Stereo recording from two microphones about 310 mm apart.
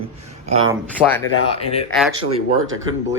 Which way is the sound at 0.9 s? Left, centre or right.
Centre.